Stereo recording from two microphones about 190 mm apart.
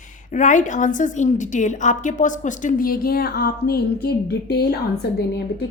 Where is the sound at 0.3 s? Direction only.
40° left (ahead or behind).